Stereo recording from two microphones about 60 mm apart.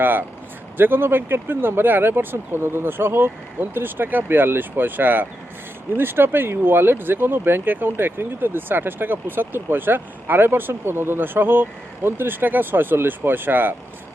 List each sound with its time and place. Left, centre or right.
0.0 s speech: right